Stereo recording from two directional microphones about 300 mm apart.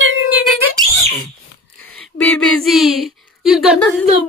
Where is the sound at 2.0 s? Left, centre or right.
Centre.